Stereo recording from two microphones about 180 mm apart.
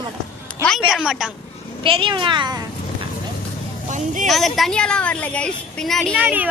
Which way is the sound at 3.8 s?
45° right (ahead or behind).